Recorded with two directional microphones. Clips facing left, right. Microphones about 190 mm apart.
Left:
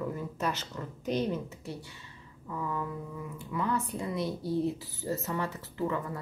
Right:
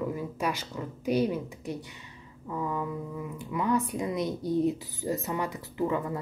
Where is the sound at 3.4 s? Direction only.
15° right (ahead or behind).